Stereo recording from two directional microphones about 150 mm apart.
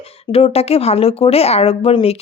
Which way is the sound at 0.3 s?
40° left (ahead or behind).